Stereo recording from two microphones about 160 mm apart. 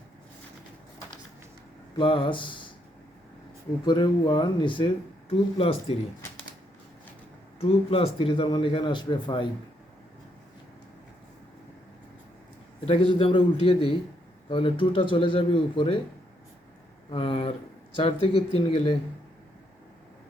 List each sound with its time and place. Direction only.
2.0 s a man's voice: 30° left (ahead or behind)
3.8 s speech: 25° left (ahead or behind)
7.6 s a man's voice: 35° left (ahead or behind)
12.8 s a man's voice: 35° left (ahead or behind)
17.1 s a man's voice: 35° left (ahead or behind)